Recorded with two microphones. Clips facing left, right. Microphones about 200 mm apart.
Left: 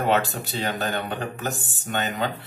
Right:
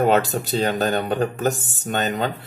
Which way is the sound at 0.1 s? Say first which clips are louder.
Right 4 dB; 40° right (ahead or behind).